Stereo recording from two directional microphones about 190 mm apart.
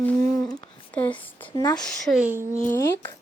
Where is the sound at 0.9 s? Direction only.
10° left (ahead or behind); by 2.4 s 10° right (ahead or behind).